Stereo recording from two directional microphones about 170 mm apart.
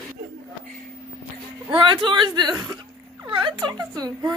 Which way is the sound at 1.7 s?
30° right (ahead or behind).